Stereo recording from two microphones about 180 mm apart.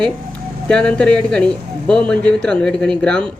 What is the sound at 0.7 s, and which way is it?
Speech, 5° left (ahead or behind).